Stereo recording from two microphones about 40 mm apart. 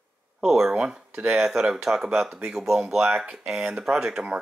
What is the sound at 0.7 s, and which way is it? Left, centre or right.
Speech, right.